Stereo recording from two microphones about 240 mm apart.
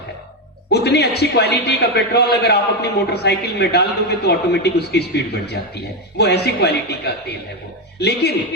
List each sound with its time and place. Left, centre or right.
0.7 s a man's voice: left